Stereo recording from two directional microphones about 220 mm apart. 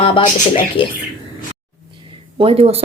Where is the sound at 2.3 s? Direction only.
25° right (ahead or behind).